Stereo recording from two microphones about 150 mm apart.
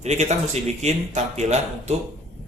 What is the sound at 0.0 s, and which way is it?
Speech, 50° right (ahead or behind).